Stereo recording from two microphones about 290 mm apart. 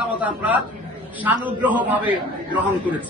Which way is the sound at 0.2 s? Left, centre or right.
Centre.